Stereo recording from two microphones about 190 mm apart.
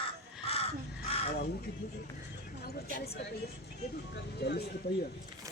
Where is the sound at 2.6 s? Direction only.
55° left (ahead or behind).